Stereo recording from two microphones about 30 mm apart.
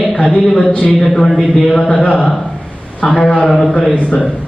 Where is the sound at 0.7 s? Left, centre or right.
Left.